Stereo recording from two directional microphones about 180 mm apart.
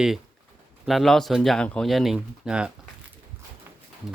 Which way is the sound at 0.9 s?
Centre (ahead or behind).